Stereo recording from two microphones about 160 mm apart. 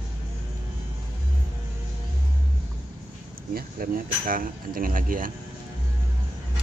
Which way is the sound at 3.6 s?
65° right (ahead or behind).